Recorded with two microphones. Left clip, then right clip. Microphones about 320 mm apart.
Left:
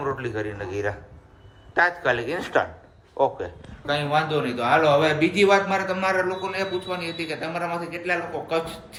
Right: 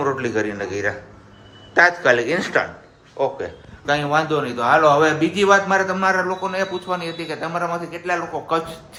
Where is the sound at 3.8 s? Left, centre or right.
Centre.